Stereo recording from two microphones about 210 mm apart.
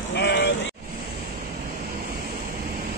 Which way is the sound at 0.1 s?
55° left (ahead or behind).